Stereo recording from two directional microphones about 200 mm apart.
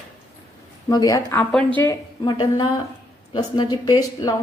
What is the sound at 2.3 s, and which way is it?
A woman's voice, 20° left (ahead or behind).